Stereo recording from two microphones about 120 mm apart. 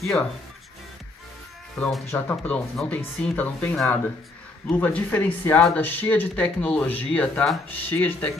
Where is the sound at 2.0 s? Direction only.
15° left (ahead or behind).